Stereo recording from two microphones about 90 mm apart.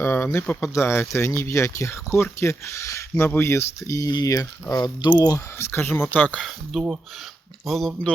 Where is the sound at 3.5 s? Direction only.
30° left (ahead or behind).